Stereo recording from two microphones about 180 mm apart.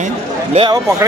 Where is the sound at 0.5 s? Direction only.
30° right (ahead or behind).